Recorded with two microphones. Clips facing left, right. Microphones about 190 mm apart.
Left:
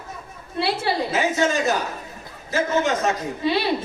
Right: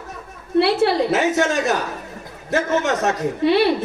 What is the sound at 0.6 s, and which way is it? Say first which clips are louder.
A man's voice: right 4 dB; 70° right (ahead or behind).